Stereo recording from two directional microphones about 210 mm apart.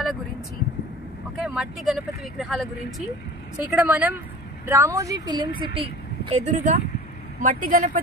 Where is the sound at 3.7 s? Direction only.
5° right (ahead or behind).